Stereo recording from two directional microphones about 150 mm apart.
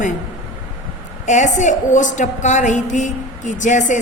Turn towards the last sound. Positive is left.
turn(degrees=55)  # may be behind; listen again after turning